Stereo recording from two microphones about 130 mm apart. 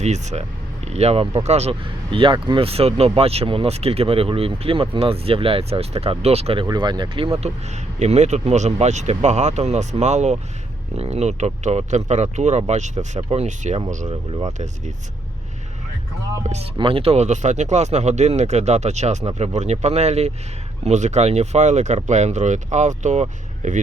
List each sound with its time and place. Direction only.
0.0 s speech: 60° right (ahead or behind)
6.7 s speech: 35° right (ahead or behind)
7.9 s speech: 60° right (ahead or behind)
16.4 s speech: 60° right (ahead or behind)
16.7 s speech: 45° right (ahead or behind); by 23.8 s 65° right (ahead or behind)